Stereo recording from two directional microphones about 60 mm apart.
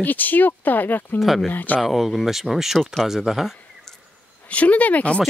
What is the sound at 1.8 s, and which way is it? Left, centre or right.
Speech, centre.